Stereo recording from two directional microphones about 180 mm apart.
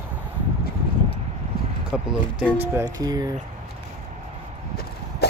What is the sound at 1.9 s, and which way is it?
Speech, 5° right (ahead or behind).